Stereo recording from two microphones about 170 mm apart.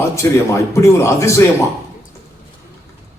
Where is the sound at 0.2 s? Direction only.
15° left (ahead or behind).